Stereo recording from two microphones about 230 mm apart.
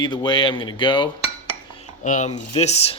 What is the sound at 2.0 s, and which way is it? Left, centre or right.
Speech, left.